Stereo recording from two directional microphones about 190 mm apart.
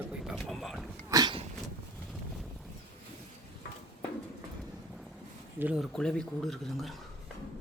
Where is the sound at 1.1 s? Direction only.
20° right (ahead or behind).